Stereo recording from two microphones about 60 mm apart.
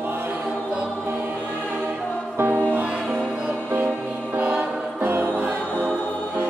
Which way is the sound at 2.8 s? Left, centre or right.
Centre.